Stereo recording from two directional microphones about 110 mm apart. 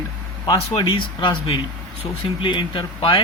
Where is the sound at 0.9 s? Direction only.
45° left (ahead or behind).